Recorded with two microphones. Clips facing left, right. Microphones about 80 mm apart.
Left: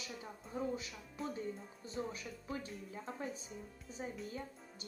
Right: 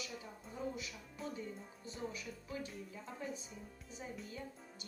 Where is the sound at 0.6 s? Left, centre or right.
Left.